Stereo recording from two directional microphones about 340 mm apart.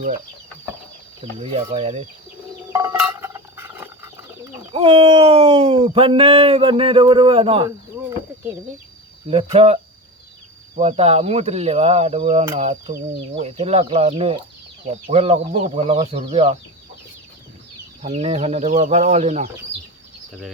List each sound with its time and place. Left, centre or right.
1.2 s speech: centre
2.7 s a sound: centre
4.7 s speech: centre
9.3 s speech: centre
18.0 s speech: centre